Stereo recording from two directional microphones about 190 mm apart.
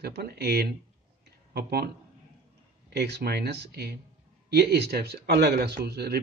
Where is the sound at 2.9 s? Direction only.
60° right (ahead or behind).